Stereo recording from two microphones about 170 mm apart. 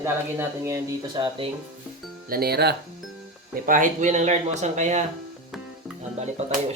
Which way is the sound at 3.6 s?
50° right (ahead or behind).